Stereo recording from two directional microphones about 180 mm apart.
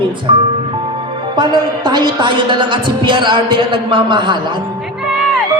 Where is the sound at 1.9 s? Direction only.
25° right (ahead or behind).